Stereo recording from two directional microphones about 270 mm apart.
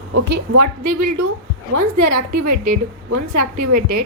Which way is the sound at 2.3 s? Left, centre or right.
Right.